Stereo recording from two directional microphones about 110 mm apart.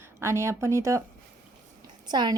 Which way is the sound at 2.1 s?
40° right (ahead or behind).